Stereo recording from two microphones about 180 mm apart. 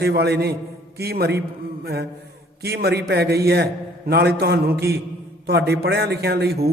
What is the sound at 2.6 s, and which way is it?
A man's voice, 65° right (ahead or behind).